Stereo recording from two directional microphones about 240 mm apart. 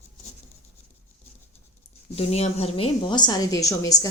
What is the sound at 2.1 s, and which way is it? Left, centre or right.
A woman's voice, left.